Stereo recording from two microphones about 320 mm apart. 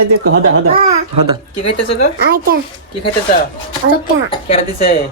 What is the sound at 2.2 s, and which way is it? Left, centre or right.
Speech, right.